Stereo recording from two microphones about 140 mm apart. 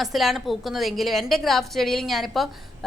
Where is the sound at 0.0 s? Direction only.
Centre (ahead or behind).